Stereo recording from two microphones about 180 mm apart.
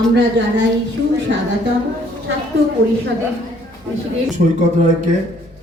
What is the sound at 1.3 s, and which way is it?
Speech, 85° right.